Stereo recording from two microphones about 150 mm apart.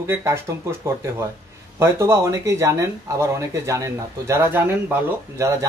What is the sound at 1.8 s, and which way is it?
Speech, 20° right (ahead or behind).